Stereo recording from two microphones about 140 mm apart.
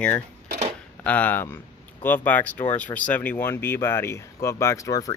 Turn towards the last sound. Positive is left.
turn(degrees=25)  # may be behind; listen again after turning